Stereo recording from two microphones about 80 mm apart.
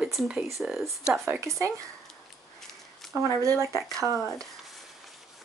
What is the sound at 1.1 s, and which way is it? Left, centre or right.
Speech, right.